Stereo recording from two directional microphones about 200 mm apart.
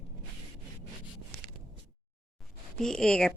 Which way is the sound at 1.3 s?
50° right (ahead or behind).